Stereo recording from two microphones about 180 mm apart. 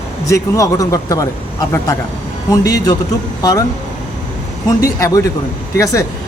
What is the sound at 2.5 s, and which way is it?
Speech, 20° left (ahead or behind).